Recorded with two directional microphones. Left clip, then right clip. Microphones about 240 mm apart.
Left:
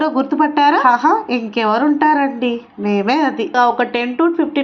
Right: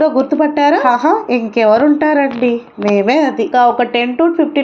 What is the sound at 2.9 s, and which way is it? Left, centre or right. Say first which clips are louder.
A woman's voice: right 3 dB; left.